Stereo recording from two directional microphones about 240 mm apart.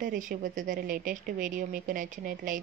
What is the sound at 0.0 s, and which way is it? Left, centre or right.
A woman's voice, right.